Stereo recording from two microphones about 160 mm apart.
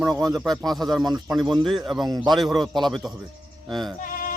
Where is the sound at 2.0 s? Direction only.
25° right (ahead or behind).